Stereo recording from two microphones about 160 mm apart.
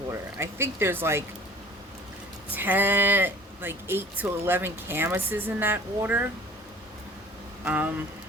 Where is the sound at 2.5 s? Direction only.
10° right (ahead or behind).